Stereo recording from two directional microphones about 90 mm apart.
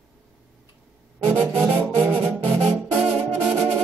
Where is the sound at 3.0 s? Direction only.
5° right (ahead or behind).